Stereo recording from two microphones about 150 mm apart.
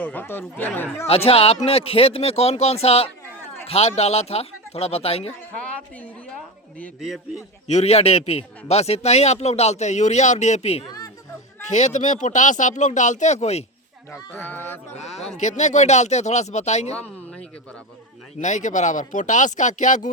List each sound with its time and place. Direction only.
0.0 s speech: 10° left (ahead or behind)
1.0 s speech: 40° left (ahead or behind)
5.5 s a woman's voice: 10° left (ahead or behind)
7.0 s a man's voice: centre (ahead or behind)
7.7 s speech: 45° left (ahead or behind)
14.1 s speech: 10° left (ahead or behind)
15.4 s speech: 50° left (ahead or behind)
17.0 s a sound: 5° left (ahead or behind)
18.3 s speech: 55° left (ahead or behind)